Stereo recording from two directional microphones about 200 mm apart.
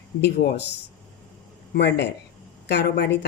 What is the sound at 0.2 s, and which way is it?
A woman's voice, 55° left (ahead or behind).